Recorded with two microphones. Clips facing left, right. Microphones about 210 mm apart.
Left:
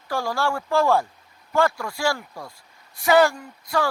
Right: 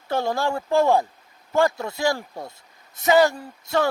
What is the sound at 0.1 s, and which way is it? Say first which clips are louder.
Speech: right 2 dB; 25° right (ahead or behind).